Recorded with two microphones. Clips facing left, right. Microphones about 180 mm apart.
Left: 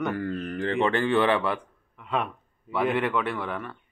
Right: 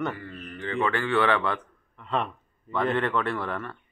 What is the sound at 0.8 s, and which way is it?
Speech, 20° left (ahead or behind).